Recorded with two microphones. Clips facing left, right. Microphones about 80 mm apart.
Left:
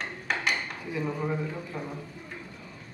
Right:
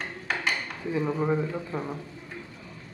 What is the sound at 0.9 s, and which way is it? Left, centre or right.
A woman's voice, right.